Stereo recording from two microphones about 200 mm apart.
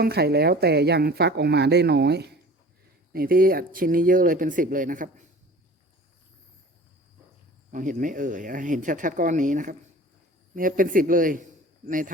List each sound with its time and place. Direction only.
0.0 s a woman's voice: 50° right (ahead or behind)
7.7 s a woman's voice: 40° right (ahead or behind)